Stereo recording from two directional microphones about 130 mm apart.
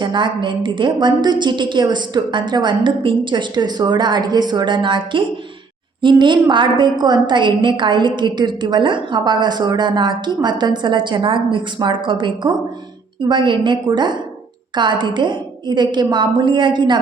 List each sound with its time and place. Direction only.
0.0 s a woman's voice: 35° right (ahead or behind)